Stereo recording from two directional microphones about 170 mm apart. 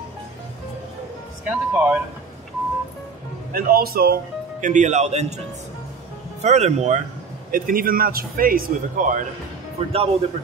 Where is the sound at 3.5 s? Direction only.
60° right (ahead or behind).